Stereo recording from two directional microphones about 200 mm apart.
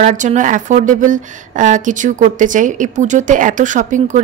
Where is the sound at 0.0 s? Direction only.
40° right (ahead or behind).